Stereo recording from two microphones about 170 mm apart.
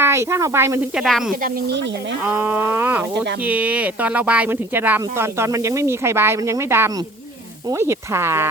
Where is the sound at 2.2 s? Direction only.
10° right (ahead or behind).